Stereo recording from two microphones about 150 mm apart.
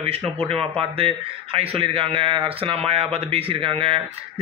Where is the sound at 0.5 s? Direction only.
40° right (ahead or behind).